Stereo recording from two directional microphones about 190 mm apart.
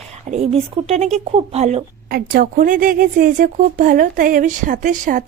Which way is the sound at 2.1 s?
50° right (ahead or behind).